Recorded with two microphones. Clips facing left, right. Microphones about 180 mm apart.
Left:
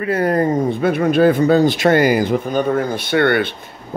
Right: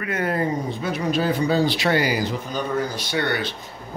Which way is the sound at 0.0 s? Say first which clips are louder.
Left 7 dB; 35° left (ahead or behind).